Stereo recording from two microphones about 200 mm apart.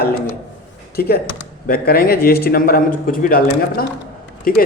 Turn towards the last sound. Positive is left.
turn(degrees=45)  # may be behind; listen again after turning